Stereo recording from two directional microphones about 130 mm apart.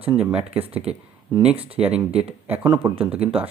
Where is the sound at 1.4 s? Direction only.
10° right (ahead or behind).